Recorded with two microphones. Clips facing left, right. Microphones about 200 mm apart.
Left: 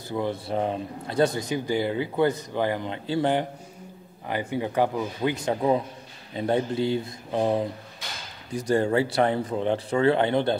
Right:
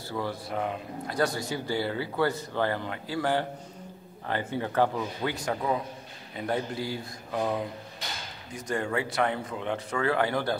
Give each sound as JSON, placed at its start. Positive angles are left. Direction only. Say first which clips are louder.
{"t": 0.1, "sound": "a man's voice", "louder": "left 5 dB", "side_deg": 20}